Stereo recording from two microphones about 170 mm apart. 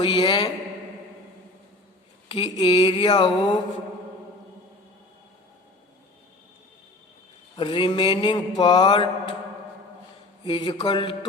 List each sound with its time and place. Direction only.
0.0 s mantra: 30° left (ahead or behind)
2.3 s mantra: 35° left (ahead or behind)
7.5 s mantra: 30° left (ahead or behind)
10.4 s mantra: 25° left (ahead or behind)